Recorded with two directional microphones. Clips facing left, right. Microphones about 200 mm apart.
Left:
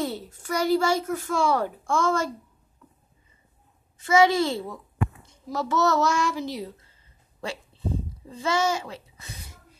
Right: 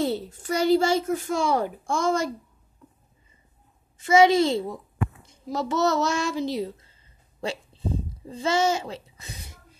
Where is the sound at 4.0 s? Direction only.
20° right (ahead or behind).